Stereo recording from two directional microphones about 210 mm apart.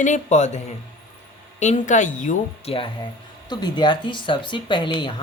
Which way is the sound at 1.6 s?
35° left (ahead or behind).